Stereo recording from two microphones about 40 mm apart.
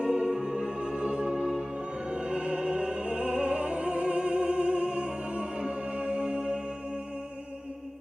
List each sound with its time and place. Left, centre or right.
0.0 s music: right
2.0 s opera: right